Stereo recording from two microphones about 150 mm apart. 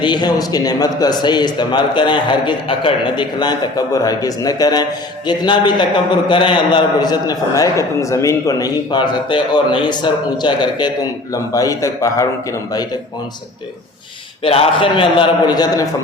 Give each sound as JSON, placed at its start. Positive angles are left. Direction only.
{"t": 0.0, "sound": "a man's voice", "side_deg": 30}
{"t": 14.4, "sound": "a man's voice", "side_deg": 35}